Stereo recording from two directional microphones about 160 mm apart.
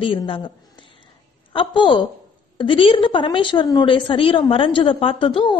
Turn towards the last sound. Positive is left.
turn(degrees=30)  # may be behind; listen again after turning